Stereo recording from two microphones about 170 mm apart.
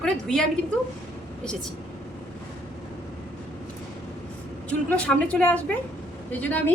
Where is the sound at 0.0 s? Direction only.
5° left (ahead or behind).